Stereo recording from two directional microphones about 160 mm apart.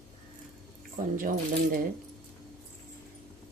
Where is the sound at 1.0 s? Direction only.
60° right (ahead or behind).